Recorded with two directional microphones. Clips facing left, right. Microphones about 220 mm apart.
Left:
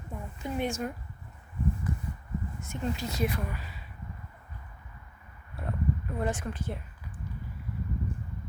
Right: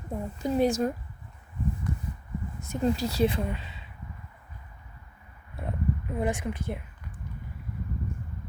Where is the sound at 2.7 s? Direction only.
35° right (ahead or behind).